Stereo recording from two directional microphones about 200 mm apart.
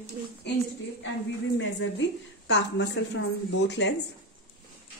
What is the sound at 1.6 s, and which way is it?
Speech, 65° left (ahead or behind).